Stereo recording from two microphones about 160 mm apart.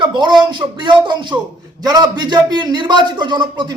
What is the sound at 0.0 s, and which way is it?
A woman's voice, 30° right (ahead or behind).